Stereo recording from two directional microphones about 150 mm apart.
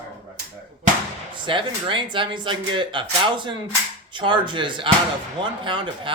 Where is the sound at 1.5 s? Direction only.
35° right (ahead or behind).